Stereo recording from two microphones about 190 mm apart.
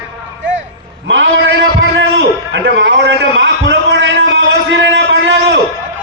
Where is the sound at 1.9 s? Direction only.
70° right (ahead or behind).